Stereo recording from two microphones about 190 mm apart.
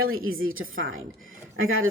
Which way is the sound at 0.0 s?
90° right.